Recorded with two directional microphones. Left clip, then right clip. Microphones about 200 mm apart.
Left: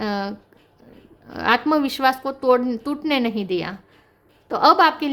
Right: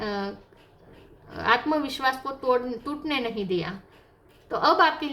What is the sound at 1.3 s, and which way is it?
A woman's voice, 55° left (ahead or behind).